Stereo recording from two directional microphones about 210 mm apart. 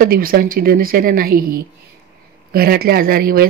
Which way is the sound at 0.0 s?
45° right (ahead or behind).